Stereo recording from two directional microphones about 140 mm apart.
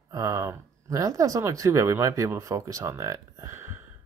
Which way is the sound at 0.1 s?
25° right (ahead or behind).